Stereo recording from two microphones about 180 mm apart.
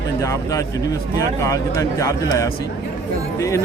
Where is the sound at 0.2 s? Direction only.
15° left (ahead or behind).